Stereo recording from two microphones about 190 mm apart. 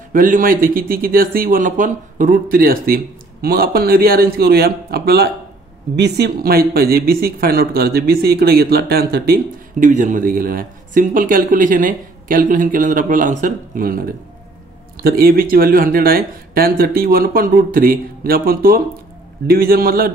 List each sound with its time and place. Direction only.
0.1 s a woman's voice: 45° right (ahead or behind)